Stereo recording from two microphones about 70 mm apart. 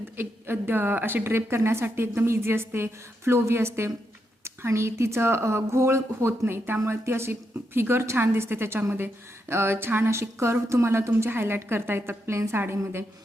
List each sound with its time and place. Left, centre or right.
0.2 s a woman's voice: right